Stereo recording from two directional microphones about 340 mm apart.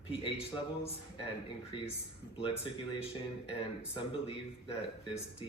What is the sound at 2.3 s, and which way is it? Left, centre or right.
Speech, centre.